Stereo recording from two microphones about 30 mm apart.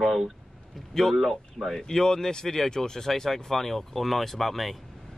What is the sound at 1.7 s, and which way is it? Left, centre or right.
Speech, centre.